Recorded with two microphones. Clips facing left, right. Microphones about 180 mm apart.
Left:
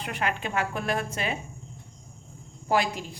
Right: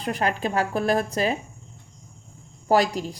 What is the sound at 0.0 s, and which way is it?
Speech, 35° right (ahead or behind).